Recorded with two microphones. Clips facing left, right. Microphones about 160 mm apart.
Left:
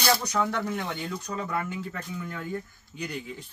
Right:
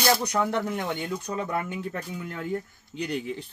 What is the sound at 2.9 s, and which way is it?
Speech, 65° right (ahead or behind).